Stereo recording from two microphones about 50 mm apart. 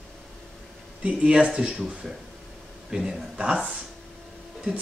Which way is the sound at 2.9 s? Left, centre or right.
Centre.